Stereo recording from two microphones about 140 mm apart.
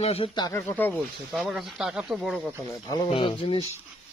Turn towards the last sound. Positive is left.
turn(degrees=40)  # may be behind; listen again after turning